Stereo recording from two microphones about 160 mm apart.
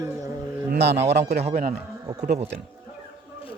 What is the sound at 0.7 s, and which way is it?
Speech, 90° right.